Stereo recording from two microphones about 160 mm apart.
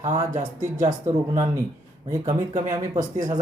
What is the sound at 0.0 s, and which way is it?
Speech, 20° right (ahead or behind).